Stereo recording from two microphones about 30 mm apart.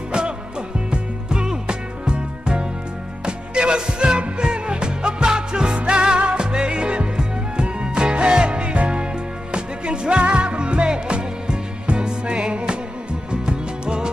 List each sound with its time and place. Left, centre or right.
0.1 s music: right